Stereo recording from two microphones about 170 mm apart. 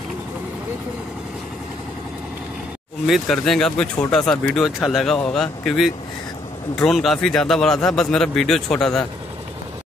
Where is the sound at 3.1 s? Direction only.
Centre (ahead or behind).